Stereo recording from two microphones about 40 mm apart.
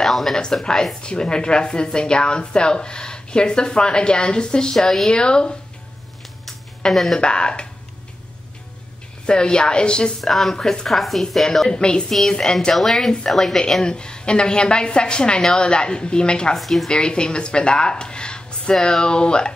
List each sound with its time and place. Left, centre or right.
0.0 s speech: centre
1.0 s speech: left
6.8 s speech: centre
7.2 s speech: left
9.2 s speech: left
10.2 s speech: centre
11.7 s speech: left
12.1 s speech: centre
13.8 s speech: left
16.5 s speech: centre
16.9 s speech: left